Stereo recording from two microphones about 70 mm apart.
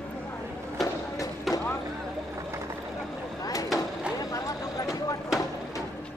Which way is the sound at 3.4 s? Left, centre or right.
Left.